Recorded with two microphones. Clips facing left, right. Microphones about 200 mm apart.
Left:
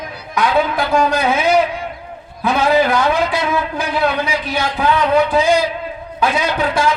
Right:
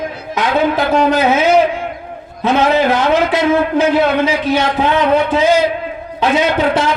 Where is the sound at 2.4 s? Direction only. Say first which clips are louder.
Right 2 dB; 25° right (ahead or behind).